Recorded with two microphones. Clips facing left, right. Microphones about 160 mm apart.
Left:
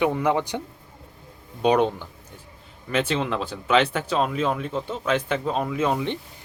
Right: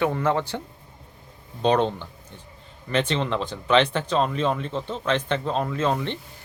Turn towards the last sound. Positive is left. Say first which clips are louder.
# left 1 dB
turn(degrees=10)  # may be behind; listen again after turning